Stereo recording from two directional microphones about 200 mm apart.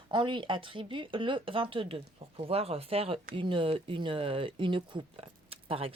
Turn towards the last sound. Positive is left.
turn(degrees=-30)  # may be behind; listen again after turning